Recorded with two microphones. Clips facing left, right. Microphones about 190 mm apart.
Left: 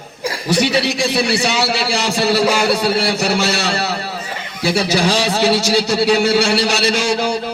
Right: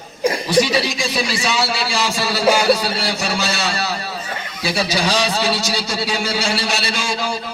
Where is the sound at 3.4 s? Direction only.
65° left (ahead or behind).